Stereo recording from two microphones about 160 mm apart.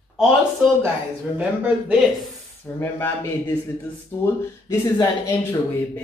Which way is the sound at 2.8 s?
15° left (ahead or behind).